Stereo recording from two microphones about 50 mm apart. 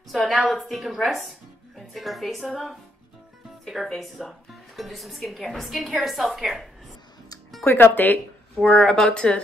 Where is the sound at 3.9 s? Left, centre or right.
Centre.